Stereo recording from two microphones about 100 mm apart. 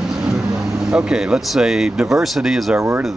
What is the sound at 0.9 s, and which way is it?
Speech, 10° right (ahead or behind).